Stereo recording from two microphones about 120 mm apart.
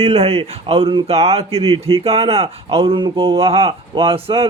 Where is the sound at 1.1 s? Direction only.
60° right (ahead or behind).